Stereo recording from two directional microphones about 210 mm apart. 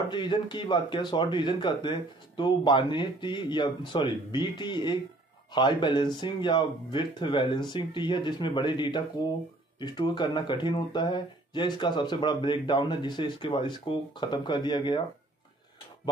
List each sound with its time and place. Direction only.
0.1 s speech: 20° left (ahead or behind)